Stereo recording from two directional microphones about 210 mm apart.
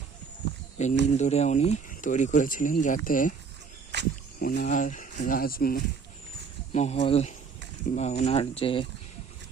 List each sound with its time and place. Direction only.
0.8 s speech: 35° left (ahead or behind)
3.9 s a sound: 55° right (ahead or behind)
4.4 s speech: 40° left (ahead or behind)
6.7 s speech: 30° left (ahead or behind)